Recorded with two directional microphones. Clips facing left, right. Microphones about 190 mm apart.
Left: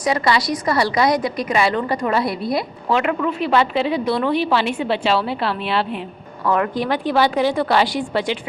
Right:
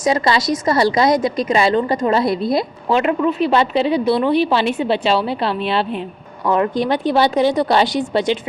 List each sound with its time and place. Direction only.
0.0 s a woman's voice: 25° right (ahead or behind)
4.0 s a woman's voice: 15° right (ahead or behind)